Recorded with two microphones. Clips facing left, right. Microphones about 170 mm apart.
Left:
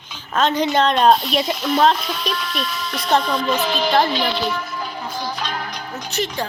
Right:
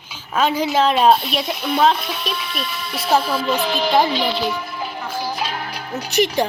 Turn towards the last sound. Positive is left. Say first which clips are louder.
# right 6 dB
turn(degrees=-15)  # may be behind; listen again after turning